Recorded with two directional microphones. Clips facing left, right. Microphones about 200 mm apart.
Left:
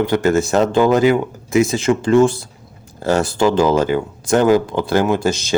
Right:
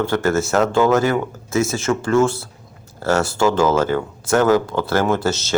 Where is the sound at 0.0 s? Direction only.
15° left (ahead or behind).